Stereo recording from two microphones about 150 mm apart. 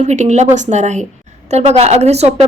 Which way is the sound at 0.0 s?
50° right (ahead or behind).